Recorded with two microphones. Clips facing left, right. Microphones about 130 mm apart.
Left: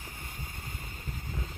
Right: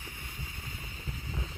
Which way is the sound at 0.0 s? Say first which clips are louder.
Left 1 dB; 45° left (ahead or behind).